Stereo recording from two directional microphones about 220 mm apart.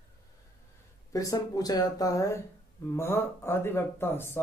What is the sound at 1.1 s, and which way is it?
Speech, 15° left (ahead or behind).